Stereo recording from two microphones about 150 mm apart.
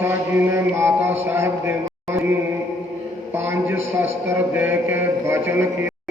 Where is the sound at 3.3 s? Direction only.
15° right (ahead or behind).